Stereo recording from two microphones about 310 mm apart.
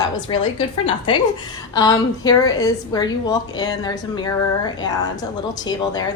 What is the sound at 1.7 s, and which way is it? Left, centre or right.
A woman's voice, centre.